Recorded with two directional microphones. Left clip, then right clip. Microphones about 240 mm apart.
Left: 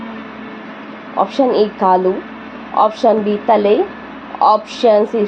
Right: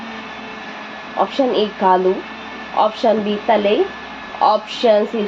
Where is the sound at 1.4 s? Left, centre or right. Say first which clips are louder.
Left 4 dB; left.